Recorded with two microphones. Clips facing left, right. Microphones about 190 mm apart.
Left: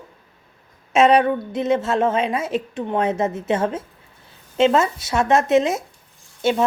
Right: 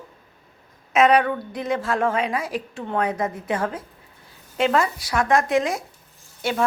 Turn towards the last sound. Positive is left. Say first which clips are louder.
# left 6 dB
turn(degrees=25)  # may be behind; listen again after turning